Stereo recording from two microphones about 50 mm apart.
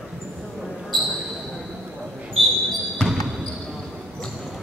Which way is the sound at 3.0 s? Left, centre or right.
Centre.